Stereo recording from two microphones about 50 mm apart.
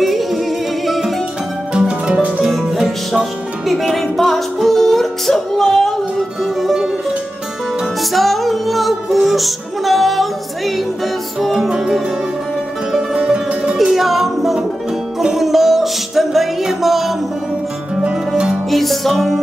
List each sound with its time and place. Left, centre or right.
0.0 s music: centre
1.7 s music: centre
2.7 s music: centre
3.9 s music: centre
6.4 s music: centre
8.1 s music: centre
11.7 s music: centre
13.1 s music: right
13.7 s music: centre
18.7 s music: centre